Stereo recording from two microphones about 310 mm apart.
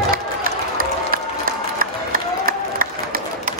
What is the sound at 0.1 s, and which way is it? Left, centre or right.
Applause, right.